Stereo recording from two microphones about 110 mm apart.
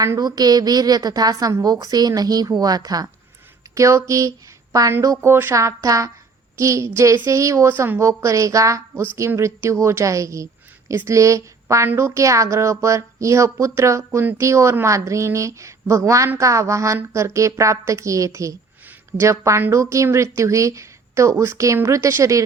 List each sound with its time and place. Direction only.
0.0 s a woman's voice: 35° right (ahead or behind)